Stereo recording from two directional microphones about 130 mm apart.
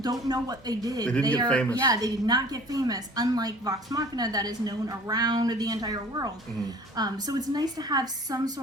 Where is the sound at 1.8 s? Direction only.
30° right (ahead or behind).